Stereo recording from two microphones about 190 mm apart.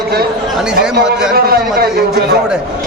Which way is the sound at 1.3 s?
55° right (ahead or behind).